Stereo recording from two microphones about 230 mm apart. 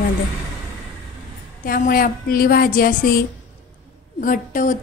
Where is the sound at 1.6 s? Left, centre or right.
Left.